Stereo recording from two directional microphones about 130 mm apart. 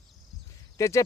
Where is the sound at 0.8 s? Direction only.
20° left (ahead or behind).